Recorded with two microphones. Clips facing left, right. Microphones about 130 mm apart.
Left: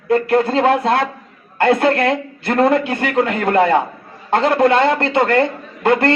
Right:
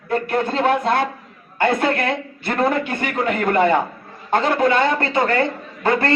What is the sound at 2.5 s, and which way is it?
A man's voice, 70° left (ahead or behind).